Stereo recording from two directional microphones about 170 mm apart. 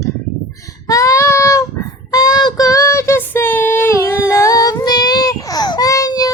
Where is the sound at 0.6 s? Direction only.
20° left (ahead or behind).